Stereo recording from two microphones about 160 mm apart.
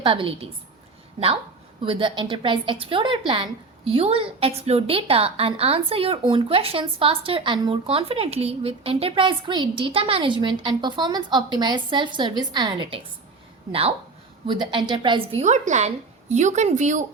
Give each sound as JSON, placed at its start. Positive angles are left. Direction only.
{"t": 0.0, "sound": "a woman's voice", "side_deg": -35}
{"t": 1.8, "sound": "a woman's voice", "side_deg": -35}
{"t": 14.4, "sound": "a woman's voice", "side_deg": -30}